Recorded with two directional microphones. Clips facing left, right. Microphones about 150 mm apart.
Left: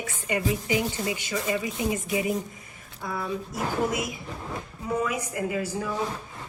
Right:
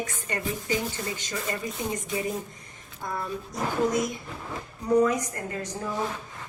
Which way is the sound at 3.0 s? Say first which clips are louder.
Left 1 dB; centre (ahead or behind).